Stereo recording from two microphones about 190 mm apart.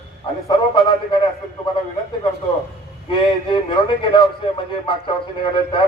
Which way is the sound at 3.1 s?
25° left (ahead or behind).